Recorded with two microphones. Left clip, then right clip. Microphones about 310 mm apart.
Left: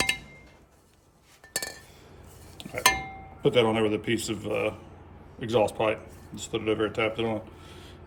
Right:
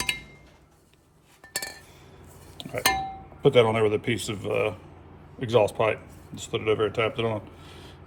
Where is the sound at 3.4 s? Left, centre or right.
Centre.